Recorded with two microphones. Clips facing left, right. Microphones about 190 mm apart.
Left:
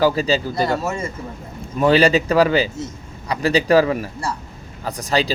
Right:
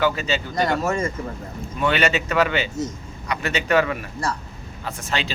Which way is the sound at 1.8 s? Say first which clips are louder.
Left 7 dB; 35° left (ahead or behind).